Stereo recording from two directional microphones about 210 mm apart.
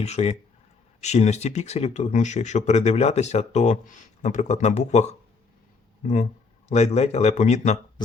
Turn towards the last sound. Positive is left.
turn(degrees=30)  # may be behind; listen again after turning